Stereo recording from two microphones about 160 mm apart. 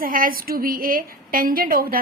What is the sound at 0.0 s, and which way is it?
A woman's voice, 60° right (ahead or behind).